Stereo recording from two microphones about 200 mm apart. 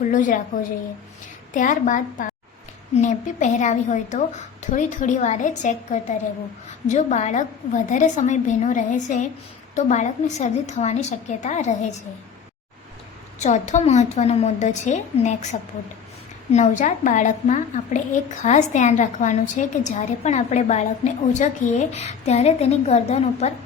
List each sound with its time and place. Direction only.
0.0 s a woman's voice: 40° left (ahead or behind)
1.5 s a woman's voice: 40° left (ahead or behind)
13.4 s a woman's voice: 35° left (ahead or behind)
16.5 s a woman's voice: 35° left (ahead or behind)